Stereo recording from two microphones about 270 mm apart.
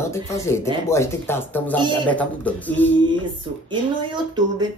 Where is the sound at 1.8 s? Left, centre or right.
Centre.